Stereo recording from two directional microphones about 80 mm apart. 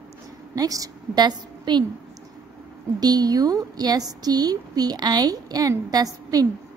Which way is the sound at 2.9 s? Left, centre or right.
Right.